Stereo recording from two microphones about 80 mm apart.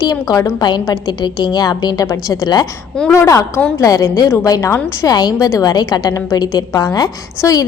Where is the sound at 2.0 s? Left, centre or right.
Left.